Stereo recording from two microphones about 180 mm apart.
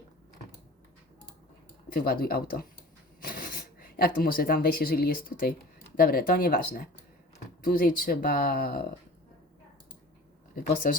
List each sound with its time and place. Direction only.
1.9 s speech: 55° left (ahead or behind)
10.5 s speech: 50° left (ahead or behind)